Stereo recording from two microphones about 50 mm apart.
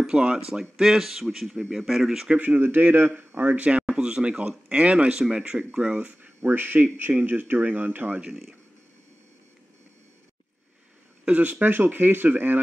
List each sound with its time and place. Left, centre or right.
0.0 s speech: centre
2.4 s speech: right
6.5 s speech: right
7.2 s speech: right
11.2 s speech: right